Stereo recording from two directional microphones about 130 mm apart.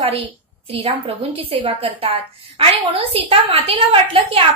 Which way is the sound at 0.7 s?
45° right (ahead or behind).